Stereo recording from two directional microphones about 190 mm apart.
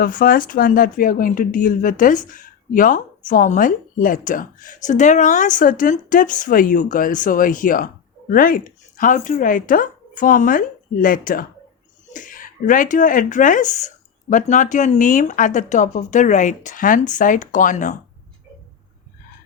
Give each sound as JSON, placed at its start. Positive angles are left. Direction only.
{"t": 0.0, "sound": "speech", "side_deg": 50}